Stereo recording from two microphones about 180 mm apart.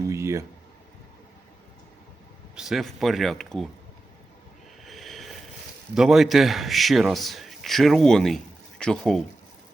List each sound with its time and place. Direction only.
0.1 s a sound: 15° right (ahead or behind)
2.6 s a man's voice: centre (ahead or behind)
4.9 s train: centre (ahead or behind)
5.9 s a man's voice: centre (ahead or behind)